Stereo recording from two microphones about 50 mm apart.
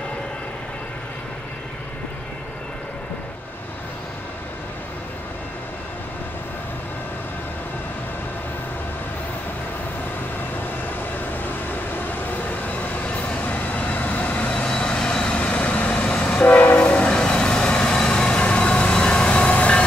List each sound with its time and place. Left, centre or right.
12.3 s vehicle: left
16.4 s train: left
16.7 s train: left